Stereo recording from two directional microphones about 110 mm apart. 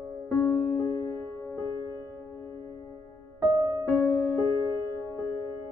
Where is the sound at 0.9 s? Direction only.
35° left (ahead or behind).